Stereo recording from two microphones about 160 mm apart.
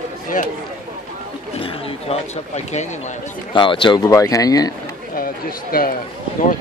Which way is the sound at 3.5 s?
30° left (ahead or behind).